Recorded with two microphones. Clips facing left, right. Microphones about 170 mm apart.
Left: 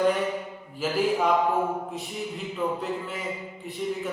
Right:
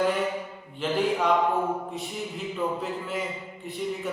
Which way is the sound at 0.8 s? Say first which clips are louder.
Left 1 dB; 5° left (ahead or behind).